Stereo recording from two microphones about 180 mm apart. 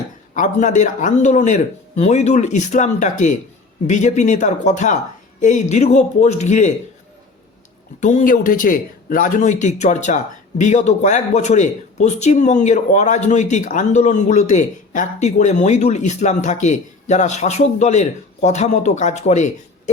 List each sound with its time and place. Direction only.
0.3 s speech: 45° left (ahead or behind)
8.0 s speech: 45° left (ahead or behind)